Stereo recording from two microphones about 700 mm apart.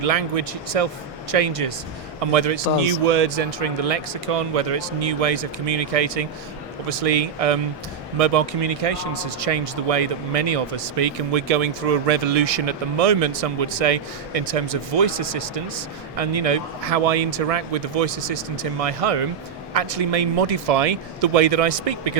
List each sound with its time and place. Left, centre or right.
0.0 s a man's voice: right